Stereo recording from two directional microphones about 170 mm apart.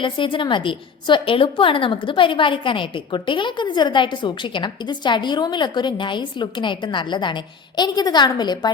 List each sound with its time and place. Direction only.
0.0 s a woman's voice: 30° left (ahead or behind)